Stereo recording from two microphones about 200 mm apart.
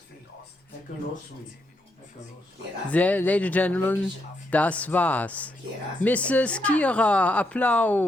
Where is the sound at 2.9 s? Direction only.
5° left (ahead or behind).